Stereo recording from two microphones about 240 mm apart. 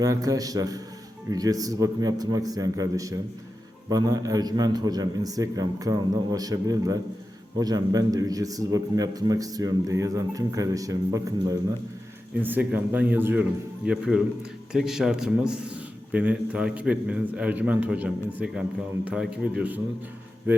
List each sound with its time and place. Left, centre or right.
0.0 s a man's voice: centre